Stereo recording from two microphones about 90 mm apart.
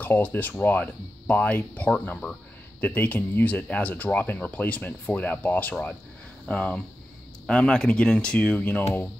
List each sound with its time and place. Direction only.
0.0 s speech: 20° left (ahead or behind)
8.8 s speech: 25° left (ahead or behind)